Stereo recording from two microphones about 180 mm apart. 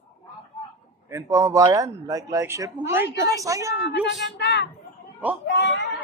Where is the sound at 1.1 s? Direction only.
20° right (ahead or behind).